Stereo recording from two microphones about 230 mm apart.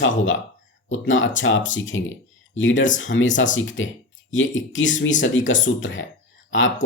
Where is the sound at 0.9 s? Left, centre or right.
Left.